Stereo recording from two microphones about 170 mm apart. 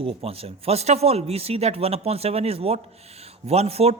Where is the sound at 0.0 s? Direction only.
35° right (ahead or behind).